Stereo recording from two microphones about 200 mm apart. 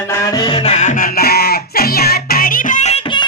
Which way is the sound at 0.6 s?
35° left (ahead or behind).